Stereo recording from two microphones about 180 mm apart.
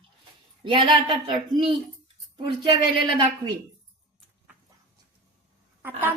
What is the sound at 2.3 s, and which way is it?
Speech, 25° right (ahead or behind).